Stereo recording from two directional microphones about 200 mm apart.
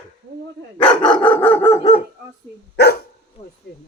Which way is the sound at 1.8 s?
30° left (ahead or behind).